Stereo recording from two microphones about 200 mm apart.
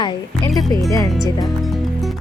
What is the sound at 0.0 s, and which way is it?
A woman's voice, 20° left (ahead or behind).